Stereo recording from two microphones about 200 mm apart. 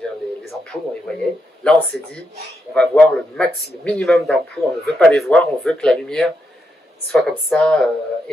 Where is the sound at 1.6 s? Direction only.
5° left (ahead or behind).